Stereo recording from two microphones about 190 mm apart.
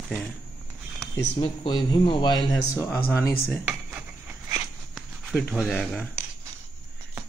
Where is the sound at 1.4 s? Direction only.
25° left (ahead or behind).